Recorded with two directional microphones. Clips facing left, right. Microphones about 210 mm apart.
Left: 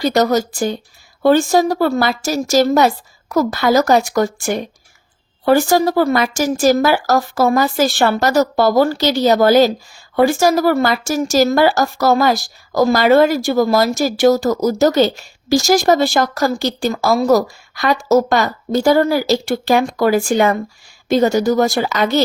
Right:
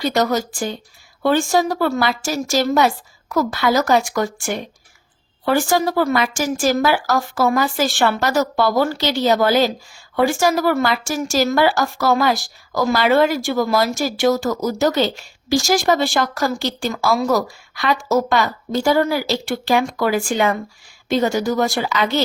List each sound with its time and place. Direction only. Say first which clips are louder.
0.0 s speech: left 4 dB; 40° left (ahead or behind)